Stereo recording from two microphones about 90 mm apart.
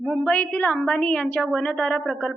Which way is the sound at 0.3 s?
15° left (ahead or behind).